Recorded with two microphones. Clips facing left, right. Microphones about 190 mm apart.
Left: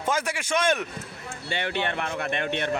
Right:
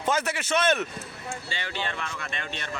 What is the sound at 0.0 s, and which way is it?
Speech, 10° left (ahead or behind).